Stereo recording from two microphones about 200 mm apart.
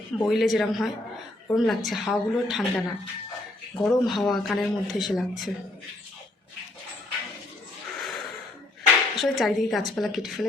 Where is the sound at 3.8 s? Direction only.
Centre (ahead or behind).